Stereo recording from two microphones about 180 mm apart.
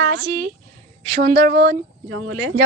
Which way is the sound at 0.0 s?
50° right (ahead or behind).